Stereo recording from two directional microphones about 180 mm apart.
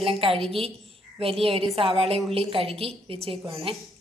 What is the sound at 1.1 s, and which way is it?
A woman's voice, 30° right (ahead or behind).